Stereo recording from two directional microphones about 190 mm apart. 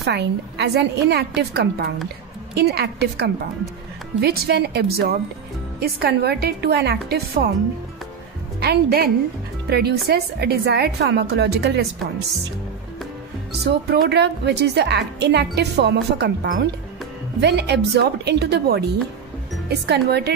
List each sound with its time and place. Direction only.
0.0 s speech: 60° right (ahead or behind)
8.5 s a woman's voice: 60° right (ahead or behind)
13.5 s speech: 60° right (ahead or behind)